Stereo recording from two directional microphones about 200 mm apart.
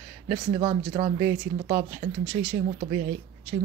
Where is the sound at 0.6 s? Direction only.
25° right (ahead or behind).